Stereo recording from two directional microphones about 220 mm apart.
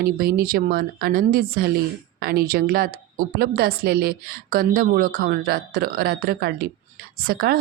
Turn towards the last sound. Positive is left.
turn(degrees=-45)  # may be behind; listen again after turning